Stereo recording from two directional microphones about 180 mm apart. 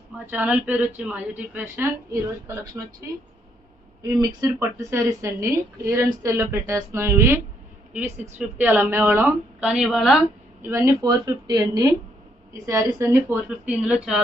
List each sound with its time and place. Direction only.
0.3 s a woman's voice: 10° right (ahead or behind)
8.4 s a woman's voice: 10° right (ahead or behind)
10.6 s speech: 15° right (ahead or behind)
13.0 s a woman's voice: 15° right (ahead or behind)